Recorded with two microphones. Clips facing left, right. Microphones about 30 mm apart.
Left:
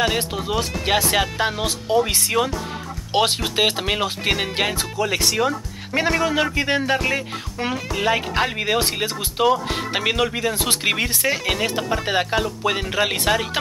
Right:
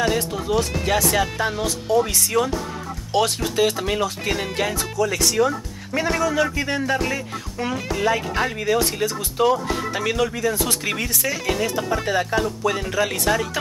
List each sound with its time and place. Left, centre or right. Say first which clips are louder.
0.0 s speech: even; left